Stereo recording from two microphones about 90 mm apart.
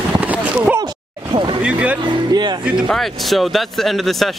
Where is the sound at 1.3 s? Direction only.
65° right (ahead or behind).